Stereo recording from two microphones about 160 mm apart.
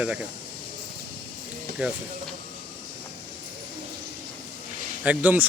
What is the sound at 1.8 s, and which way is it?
Speech, 10° right (ahead or behind).